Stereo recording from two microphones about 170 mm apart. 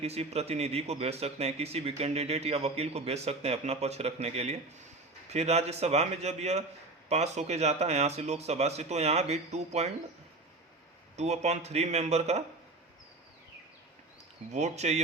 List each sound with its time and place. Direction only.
0.0 s a man's voice: 40° right (ahead or behind)
11.2 s a man's voice: 40° right (ahead or behind)
14.5 s a man's voice: 40° right (ahead or behind)